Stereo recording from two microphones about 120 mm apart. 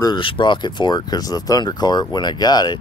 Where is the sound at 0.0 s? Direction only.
40° left (ahead or behind).